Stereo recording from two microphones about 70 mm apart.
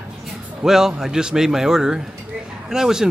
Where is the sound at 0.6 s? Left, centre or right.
Centre.